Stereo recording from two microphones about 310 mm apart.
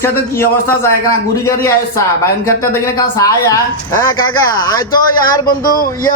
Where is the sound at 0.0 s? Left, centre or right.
Centre.